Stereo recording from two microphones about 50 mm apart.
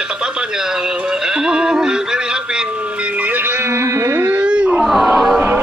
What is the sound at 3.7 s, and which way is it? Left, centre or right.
Music, right.